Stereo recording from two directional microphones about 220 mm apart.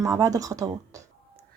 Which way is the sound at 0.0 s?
15° right (ahead or behind).